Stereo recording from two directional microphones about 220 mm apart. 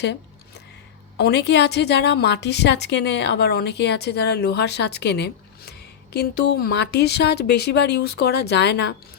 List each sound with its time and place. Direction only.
1.2 s a woman's voice: 50° left (ahead or behind)